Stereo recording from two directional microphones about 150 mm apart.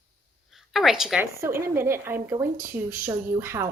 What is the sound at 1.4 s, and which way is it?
A woman's voice, 15° right (ahead or behind).